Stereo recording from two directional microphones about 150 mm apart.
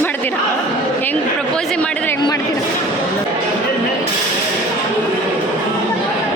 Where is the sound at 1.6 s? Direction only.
5° left (ahead or behind).